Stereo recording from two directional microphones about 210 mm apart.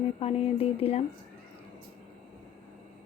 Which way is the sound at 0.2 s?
30° left (ahead or behind).